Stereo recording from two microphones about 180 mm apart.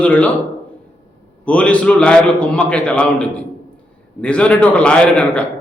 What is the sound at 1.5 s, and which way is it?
A man's voice, 5° left (ahead or behind).